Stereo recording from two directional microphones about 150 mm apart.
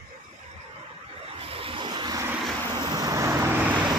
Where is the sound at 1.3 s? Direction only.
40° right (ahead or behind).